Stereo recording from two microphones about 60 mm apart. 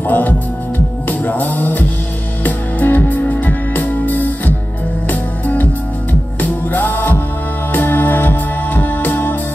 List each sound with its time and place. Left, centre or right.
0.1 s music: left
6.4 s music: left